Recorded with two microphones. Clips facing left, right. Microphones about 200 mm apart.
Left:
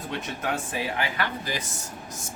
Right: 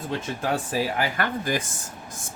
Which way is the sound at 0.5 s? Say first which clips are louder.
Right 6 dB; 35° right (ahead or behind).